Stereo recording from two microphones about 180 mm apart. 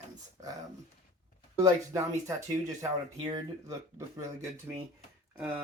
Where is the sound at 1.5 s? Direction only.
20° right (ahead or behind).